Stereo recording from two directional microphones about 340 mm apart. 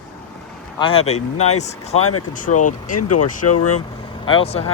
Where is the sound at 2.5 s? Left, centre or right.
Left.